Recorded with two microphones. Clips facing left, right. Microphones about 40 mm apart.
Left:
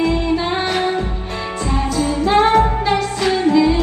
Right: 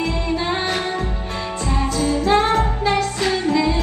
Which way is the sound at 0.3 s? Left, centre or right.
Centre.